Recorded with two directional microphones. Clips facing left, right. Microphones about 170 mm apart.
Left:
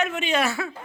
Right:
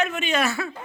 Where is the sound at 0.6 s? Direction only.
15° left (ahead or behind).